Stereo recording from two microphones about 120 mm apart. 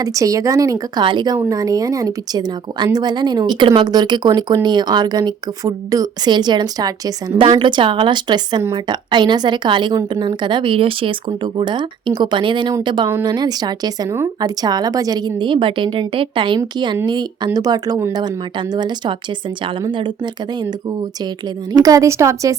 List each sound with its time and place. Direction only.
0.0 s speech: 30° right (ahead or behind)
1.0 s speech: 40° right (ahead or behind)
7.3 s a woman's voice: 45° right (ahead or behind); by 22.5 s 25° right (ahead or behind)